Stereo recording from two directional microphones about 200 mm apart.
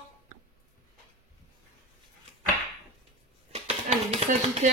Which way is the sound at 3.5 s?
30° right (ahead or behind).